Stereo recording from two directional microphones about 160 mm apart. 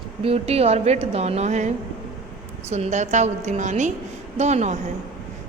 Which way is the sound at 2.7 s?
45° right (ahead or behind).